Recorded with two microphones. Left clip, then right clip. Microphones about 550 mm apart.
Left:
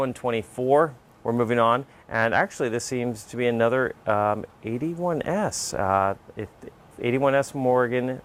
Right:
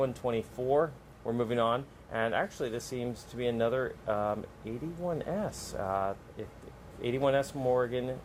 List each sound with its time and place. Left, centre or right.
0.0 s speech: left